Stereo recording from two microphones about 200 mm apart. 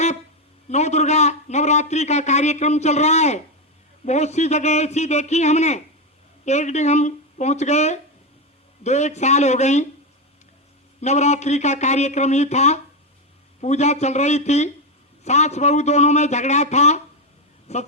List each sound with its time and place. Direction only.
0.7 s a man's voice: 35° left (ahead or behind)
11.0 s a man's voice: 35° left (ahead or behind)